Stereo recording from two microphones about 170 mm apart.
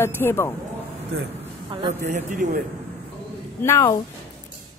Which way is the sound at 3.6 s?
15° left (ahead or behind).